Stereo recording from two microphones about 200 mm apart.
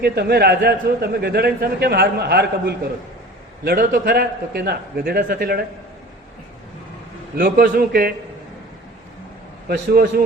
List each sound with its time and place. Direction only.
0.0 s a man's voice: 50° right (ahead or behind)
7.3 s a man's voice: 45° right (ahead or behind)
9.6 s a man's voice: 50° right (ahead or behind)